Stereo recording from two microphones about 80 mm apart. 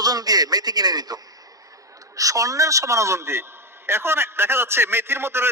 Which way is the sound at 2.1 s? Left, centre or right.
Right.